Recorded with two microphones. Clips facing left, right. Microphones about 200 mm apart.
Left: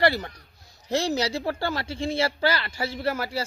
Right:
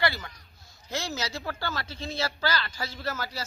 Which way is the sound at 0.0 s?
35° left (ahead or behind).